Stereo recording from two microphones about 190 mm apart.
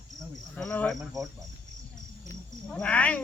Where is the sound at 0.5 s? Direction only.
5° left (ahead or behind).